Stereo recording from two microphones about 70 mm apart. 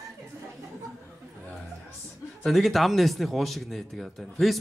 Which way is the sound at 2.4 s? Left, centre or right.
Centre.